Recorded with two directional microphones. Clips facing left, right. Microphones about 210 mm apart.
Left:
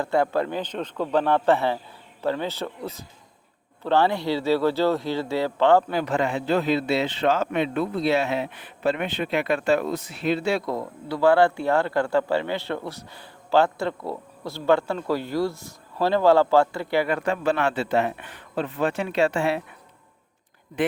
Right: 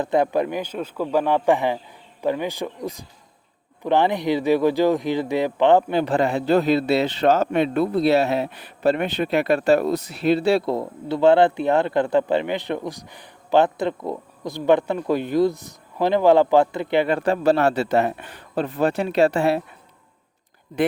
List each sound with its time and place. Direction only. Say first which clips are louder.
0.0 s a man's voice: right 3 dB; 20° right (ahead or behind); by 19.6 s 35° right (ahead or behind)